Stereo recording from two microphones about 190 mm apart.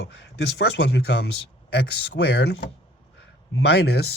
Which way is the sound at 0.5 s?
60° left (ahead or behind).